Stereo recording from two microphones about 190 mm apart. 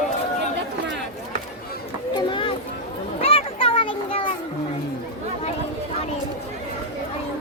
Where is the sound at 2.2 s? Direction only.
25° left (ahead or behind).